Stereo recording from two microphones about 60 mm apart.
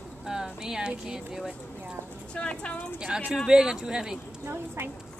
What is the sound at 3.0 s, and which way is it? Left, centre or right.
Speech, centre.